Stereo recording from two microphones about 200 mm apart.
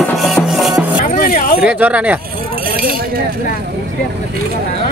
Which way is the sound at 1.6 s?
5° right (ahead or behind).